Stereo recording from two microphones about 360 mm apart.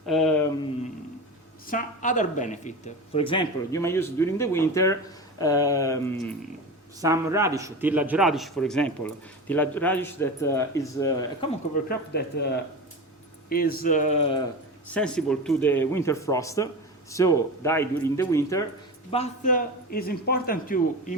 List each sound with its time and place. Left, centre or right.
0.0 s a sound: centre
1.6 s speech: left; by 6.3 s centre
7.0 s a man's voice: centre
11.9 s a man's voice: left
14.8 s a man's voice: centre
19.1 s a man's voice: centre